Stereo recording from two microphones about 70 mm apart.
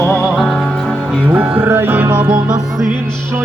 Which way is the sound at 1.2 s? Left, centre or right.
Right.